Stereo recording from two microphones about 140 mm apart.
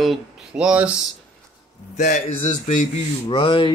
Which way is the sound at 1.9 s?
60° left (ahead or behind).